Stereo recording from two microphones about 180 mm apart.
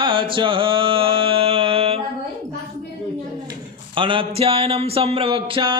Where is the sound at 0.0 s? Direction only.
30° right (ahead or behind).